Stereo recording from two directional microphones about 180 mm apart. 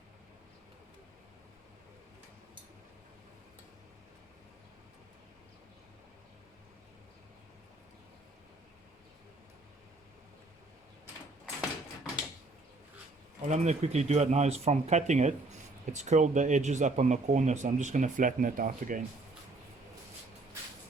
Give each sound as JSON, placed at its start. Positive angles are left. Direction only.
{"t": 13.4, "sound": "speech", "side_deg": -40}